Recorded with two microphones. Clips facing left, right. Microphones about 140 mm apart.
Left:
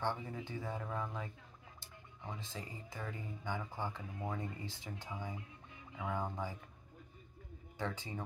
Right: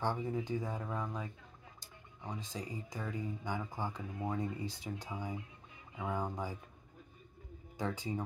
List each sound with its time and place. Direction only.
0.0 s speech: 15° right (ahead or behind)
7.7 s speech: 10° right (ahead or behind)